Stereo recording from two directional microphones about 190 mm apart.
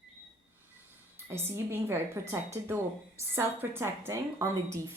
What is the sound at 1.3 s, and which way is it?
A woman's voice, 15° right (ahead or behind).